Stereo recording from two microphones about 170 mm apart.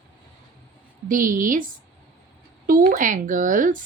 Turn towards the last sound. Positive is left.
turn(degrees=-50)  # may be behind; listen again after turning